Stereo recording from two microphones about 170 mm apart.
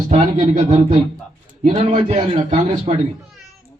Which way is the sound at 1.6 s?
45° right (ahead or behind).